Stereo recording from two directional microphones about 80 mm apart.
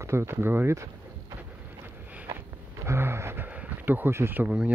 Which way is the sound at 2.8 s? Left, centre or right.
Right.